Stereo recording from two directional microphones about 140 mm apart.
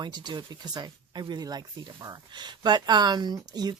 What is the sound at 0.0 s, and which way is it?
Speech, 30° right (ahead or behind).